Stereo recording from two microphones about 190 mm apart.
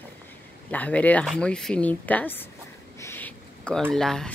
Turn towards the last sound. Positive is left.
turn(degrees=0)  # may be behind; listen again after turning